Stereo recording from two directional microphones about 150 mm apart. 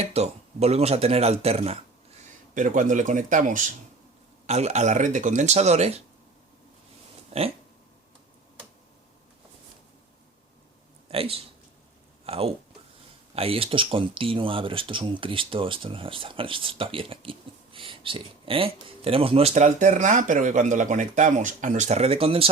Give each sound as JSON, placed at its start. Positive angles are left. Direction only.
{"t": 0.0, "sound": "speech", "side_deg": -45}
{"t": 2.6, "sound": "speech", "side_deg": -60}
{"t": 4.4, "sound": "speech", "side_deg": -45}
{"t": 7.3, "sound": "speech", "side_deg": -45}
{"t": 11.1, "sound": "speech", "side_deg": -40}